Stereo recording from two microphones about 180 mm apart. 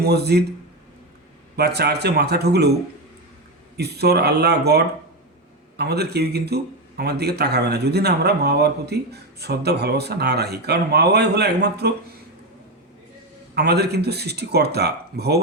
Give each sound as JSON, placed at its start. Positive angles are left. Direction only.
{"t": 0.0, "sound": "speech", "side_deg": -65}
{"t": 1.5, "sound": "speech", "side_deg": -65}
{"t": 3.8, "sound": "speech", "side_deg": -65}
{"t": 13.6, "sound": "speech", "side_deg": -65}